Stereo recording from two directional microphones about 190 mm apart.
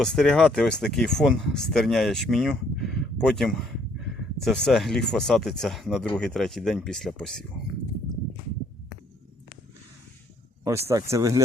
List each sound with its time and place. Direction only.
0.0 s speech: centre (ahead or behind)
10.8 s speech: 15° right (ahead or behind)